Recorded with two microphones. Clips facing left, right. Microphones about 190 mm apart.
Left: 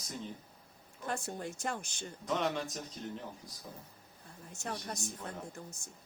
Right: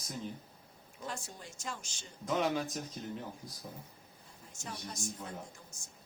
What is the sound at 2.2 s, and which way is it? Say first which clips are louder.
Speech: right 2 dB; centre (ahead or behind).